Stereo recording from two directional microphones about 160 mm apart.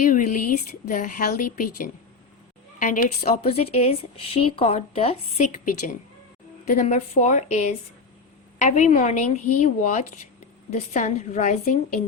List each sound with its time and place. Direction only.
0.0 s a woman's voice: 55° left (ahead or behind)
3.4 s speech: 40° left (ahead or behind)
6.7 s a woman's voice: 45° left (ahead or behind)